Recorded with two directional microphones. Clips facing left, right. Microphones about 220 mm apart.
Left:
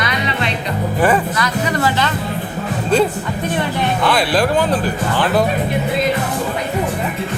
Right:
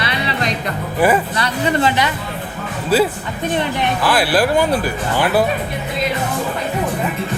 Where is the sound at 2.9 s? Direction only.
5° right (ahead or behind).